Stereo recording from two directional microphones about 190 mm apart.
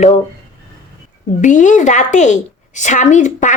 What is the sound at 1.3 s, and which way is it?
A woman's voice, 40° left (ahead or behind).